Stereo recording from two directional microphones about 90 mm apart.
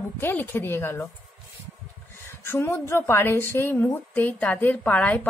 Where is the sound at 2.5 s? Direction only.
30° left (ahead or behind).